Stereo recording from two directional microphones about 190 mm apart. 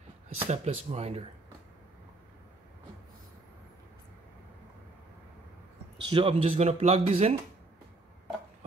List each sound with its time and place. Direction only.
0.4 s speech: 30° right (ahead or behind)
6.0 s speech: 30° right (ahead or behind)